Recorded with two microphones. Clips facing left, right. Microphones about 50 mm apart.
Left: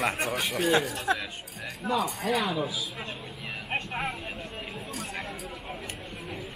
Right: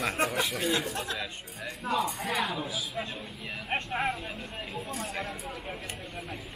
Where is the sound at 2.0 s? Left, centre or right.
Right.